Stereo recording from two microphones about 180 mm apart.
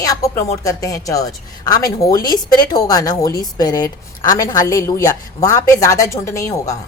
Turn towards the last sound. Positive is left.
turn(degrees=15)  # may be behind; listen again after turning